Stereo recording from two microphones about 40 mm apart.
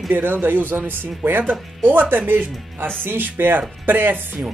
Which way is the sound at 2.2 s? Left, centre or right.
Right.